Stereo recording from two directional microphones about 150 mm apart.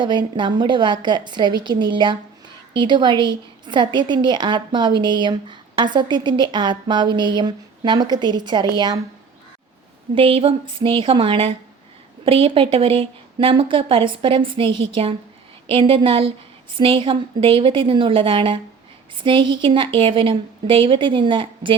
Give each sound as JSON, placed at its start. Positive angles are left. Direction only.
{"t": 0.0, "sound": "a woman's voice", "side_deg": -30}
{"t": 10.2, "sound": "a woman's voice", "side_deg": -35}